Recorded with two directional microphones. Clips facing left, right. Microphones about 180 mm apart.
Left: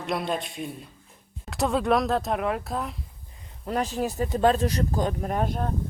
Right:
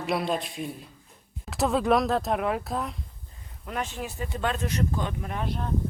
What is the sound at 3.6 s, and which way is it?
Speech, 35° left (ahead or behind).